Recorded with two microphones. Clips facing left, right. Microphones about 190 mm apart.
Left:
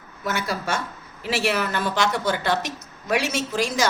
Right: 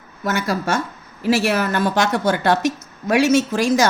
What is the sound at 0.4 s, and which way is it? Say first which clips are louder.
A woman's voice: right 6 dB; 45° right (ahead or behind).